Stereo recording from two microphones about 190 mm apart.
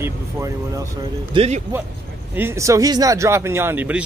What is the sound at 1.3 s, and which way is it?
Speech, 30° right (ahead or behind).